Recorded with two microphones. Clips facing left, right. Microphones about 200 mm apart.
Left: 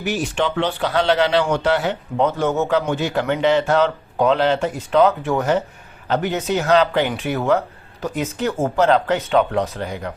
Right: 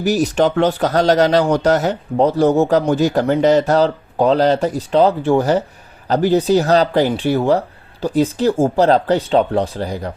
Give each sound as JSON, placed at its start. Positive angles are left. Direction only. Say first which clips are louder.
{"t": 0.0, "sound": "speech", "louder": "right 6 dB", "side_deg": -40}